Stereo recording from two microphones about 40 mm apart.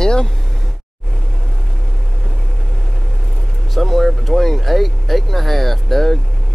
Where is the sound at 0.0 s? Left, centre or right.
Centre.